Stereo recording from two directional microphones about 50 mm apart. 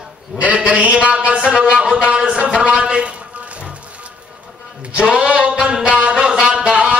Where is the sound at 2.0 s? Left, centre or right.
Centre.